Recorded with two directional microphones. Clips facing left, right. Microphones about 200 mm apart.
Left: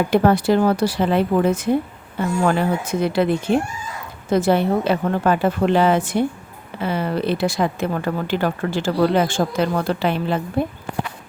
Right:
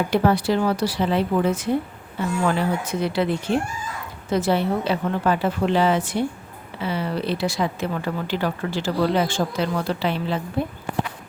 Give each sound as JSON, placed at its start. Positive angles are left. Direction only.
{"t": 0.1, "sound": "a woman's voice", "side_deg": 50}